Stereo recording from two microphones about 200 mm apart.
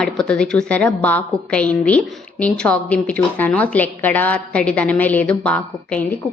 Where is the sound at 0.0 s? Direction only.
5° left (ahead or behind).